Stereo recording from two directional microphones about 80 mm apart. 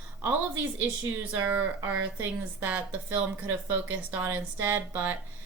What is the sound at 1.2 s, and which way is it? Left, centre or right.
Speech, right.